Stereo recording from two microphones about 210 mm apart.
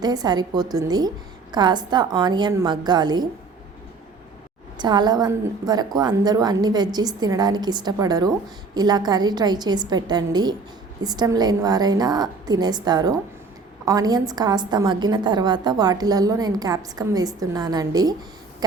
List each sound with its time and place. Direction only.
0.0 s a woman's voice: 20° right (ahead or behind)
4.8 s a woman's voice: 20° right (ahead or behind)